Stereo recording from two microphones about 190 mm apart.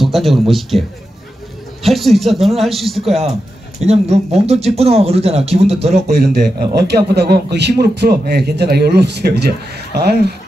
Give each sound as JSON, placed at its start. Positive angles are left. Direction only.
{"t": 0.0, "sound": "speech", "side_deg": 0}
{"t": 3.8, "sound": "speech", "side_deg": -35}
{"t": 6.0, "sound": "a man's voice", "side_deg": -60}